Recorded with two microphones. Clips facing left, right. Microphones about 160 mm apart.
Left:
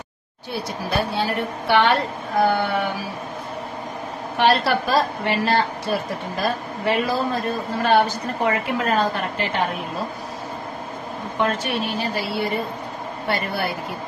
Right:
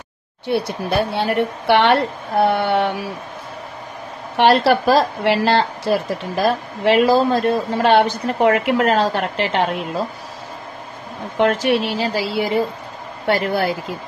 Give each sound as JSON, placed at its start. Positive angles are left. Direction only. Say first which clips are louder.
{"t": 0.5, "sound": "speech", "louder": "right 6 dB", "side_deg": -65}
{"t": 4.4, "sound": "a woman's voice", "louder": "right 5 dB", "side_deg": -70}
{"t": 11.3, "sound": "a woman's voice", "louder": "right 7 dB", "side_deg": -75}